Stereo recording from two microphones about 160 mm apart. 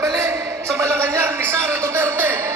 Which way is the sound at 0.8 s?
15° right (ahead or behind).